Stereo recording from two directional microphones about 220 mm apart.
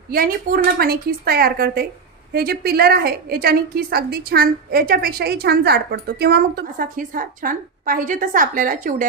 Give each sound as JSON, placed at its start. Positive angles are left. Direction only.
{"t": 0.1, "sound": "a woman's voice", "side_deg": -40}